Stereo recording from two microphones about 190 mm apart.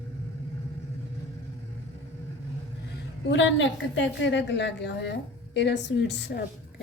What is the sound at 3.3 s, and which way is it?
A woman's voice, 75° left (ahead or behind).